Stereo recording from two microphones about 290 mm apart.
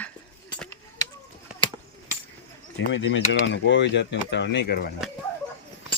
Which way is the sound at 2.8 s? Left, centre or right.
Left.